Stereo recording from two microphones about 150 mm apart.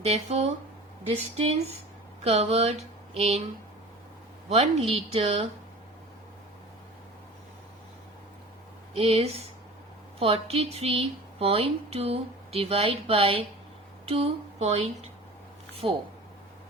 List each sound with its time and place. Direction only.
0.0 s mantra: 45° right (ahead or behind)
4.9 s mantra: 45° right (ahead or behind)
9.0 s speech: 40° right (ahead or behind)
15.8 s speech: 35° right (ahead or behind)